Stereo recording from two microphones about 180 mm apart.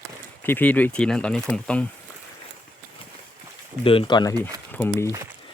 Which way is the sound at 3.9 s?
30° left (ahead or behind).